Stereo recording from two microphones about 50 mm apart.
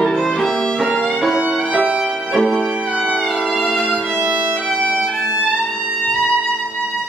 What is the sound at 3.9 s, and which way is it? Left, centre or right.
Violin, centre.